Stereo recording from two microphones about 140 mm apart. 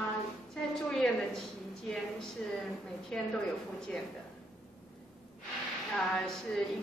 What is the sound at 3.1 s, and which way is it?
Speech, 5° left (ahead or behind).